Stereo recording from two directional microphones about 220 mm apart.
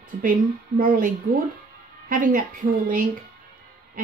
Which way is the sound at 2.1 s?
35° right (ahead or behind).